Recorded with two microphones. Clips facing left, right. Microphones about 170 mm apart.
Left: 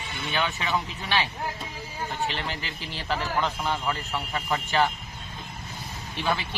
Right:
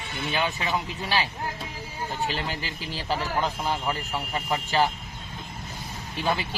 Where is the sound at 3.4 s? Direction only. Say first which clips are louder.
Right 1 dB; 10° right (ahead or behind).